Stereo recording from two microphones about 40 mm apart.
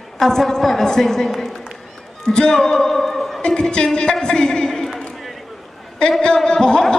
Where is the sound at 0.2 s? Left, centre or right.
Centre.